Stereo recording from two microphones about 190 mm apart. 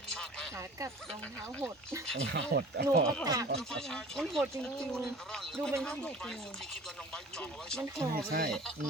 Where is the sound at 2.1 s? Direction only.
65° right (ahead or behind).